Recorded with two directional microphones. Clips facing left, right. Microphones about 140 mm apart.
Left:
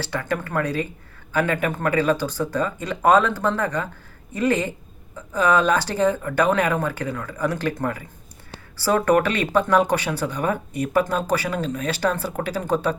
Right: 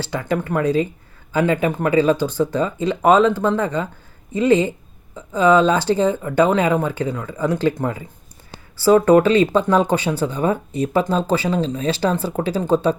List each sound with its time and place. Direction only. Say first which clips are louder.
0.1 s speech: right 5 dB; 20° right (ahead or behind)